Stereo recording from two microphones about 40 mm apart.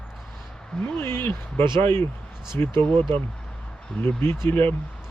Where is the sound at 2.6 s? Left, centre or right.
Left.